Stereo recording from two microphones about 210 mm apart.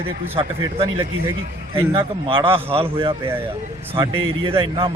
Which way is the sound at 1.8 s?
25° right (ahead or behind).